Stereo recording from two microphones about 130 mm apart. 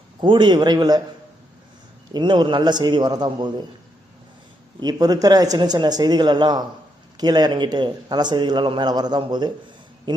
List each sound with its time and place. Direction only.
0.2 s a man's voice: 35° right (ahead or behind)
2.1 s a man's voice: 35° right (ahead or behind)
4.8 s a man's voice: 30° right (ahead or behind)